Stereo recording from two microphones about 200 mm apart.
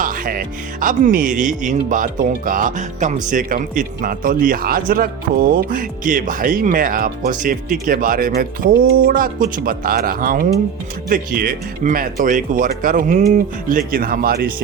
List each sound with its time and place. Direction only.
0.0 s a man's voice: 45° right (ahead or behind)